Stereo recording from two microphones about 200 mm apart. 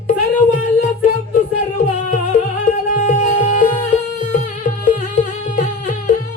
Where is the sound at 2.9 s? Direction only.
35° left (ahead or behind).